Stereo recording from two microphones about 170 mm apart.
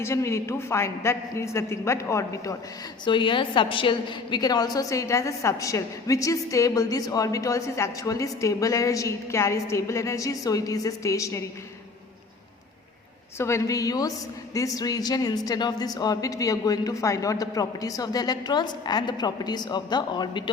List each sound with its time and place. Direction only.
0.0 s a man's voice: 15° left (ahead or behind)
13.4 s a woman's voice: 15° left (ahead or behind)